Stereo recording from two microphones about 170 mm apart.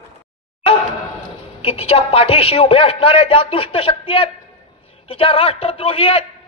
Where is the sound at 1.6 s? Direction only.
35° left (ahead or behind).